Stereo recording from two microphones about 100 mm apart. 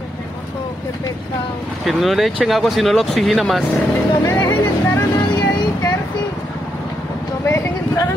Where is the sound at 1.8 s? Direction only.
Centre (ahead or behind).